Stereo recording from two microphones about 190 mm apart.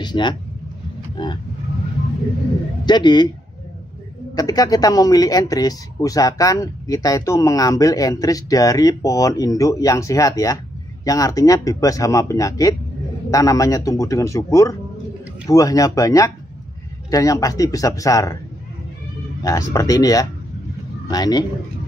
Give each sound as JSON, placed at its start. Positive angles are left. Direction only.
{"t": 0.0, "sound": "speech", "side_deg": 25}
{"t": 1.1, "sound": "vehicle", "side_deg": 25}
{"t": 2.8, "sound": "speech", "side_deg": 25}
{"t": 4.4, "sound": "speech", "side_deg": 20}
{"t": 19.4, "sound": "speech", "side_deg": 15}